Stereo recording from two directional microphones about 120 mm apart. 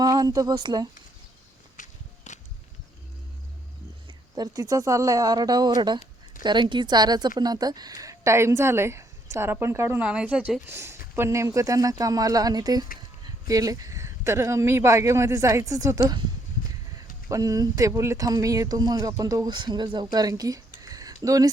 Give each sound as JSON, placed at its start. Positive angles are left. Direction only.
{"t": 0.0, "sound": "speech", "side_deg": -30}
{"t": 1.7, "sound": "walk", "side_deg": 90}
{"t": 4.4, "sound": "speech", "side_deg": -30}
{"t": 17.2, "sound": "speech", "side_deg": -30}